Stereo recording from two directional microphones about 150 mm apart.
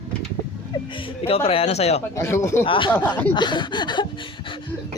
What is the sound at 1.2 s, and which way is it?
Speech, 40° left (ahead or behind).